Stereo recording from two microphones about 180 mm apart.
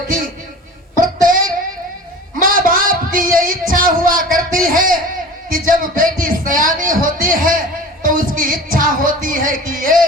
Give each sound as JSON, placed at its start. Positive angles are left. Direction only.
{"t": 0.9, "sound": "music", "side_deg": -50}
{"t": 2.4, "sound": "a sound", "side_deg": -50}
{"t": 4.5, "sound": "a man's voice", "side_deg": -50}
{"t": 8.0, "sound": "music", "side_deg": -50}